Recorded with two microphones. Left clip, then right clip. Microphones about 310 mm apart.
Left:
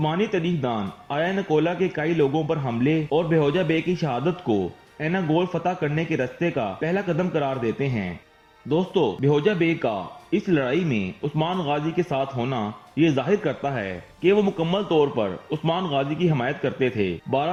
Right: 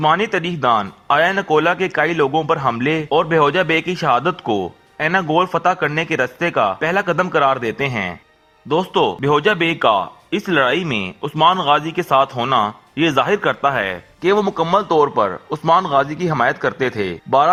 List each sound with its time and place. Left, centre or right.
0.2 s a man's voice: right